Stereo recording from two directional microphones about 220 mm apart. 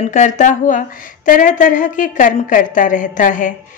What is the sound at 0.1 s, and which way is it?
Speech, 35° left (ahead or behind).